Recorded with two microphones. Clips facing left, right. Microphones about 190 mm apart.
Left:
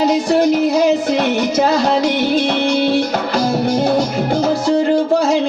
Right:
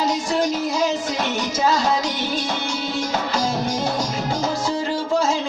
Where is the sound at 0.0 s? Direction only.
60° left (ahead or behind).